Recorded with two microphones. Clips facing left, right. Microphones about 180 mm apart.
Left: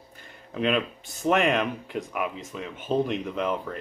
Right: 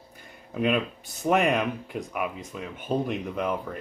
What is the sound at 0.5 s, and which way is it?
Speech, 5° right (ahead or behind).